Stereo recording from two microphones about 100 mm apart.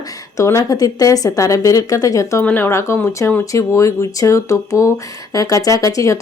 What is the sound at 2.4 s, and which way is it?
A woman's voice, 20° left (ahead or behind).